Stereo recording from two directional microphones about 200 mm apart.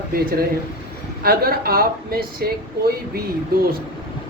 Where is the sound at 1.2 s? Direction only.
50° right (ahead or behind).